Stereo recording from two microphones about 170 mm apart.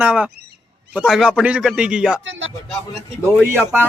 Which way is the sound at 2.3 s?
90° right.